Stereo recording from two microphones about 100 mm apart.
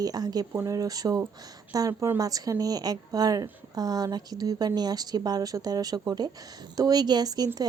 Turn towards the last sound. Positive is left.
turn(degrees=-40)  # may be behind; listen again after turning